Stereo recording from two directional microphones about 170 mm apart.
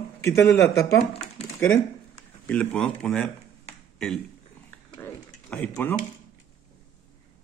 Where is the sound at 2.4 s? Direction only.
5° left (ahead or behind).